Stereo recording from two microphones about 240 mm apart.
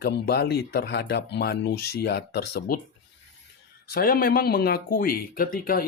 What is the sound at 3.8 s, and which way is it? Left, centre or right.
Speech, left.